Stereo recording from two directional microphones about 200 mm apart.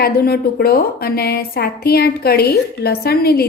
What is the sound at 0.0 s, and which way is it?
A woman's voice, 50° left (ahead or behind).